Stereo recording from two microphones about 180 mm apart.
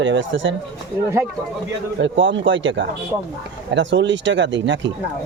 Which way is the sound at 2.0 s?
90° right.